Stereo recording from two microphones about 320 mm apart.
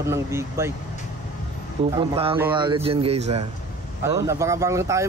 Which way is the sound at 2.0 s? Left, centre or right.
Centre.